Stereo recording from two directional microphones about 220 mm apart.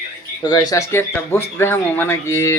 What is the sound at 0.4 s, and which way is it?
Speech, 20° left (ahead or behind).